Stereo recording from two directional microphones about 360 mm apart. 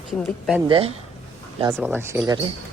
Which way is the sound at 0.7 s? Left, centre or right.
Centre.